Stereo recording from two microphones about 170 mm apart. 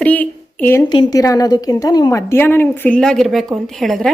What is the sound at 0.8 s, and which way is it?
A woman's voice, 25° left (ahead or behind).